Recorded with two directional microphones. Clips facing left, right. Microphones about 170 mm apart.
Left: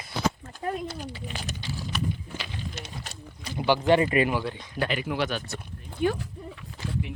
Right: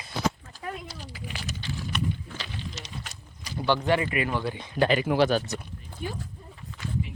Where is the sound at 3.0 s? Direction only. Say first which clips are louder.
Left 5 dB; 30° left (ahead or behind).